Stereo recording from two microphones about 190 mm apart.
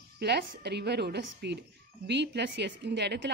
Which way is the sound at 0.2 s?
60° right (ahead or behind).